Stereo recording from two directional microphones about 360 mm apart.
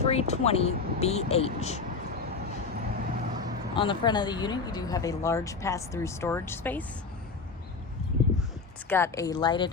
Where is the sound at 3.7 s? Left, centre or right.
Centre.